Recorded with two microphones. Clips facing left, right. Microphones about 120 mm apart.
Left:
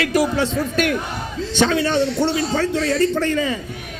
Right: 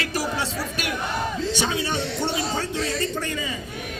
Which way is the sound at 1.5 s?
15° right (ahead or behind).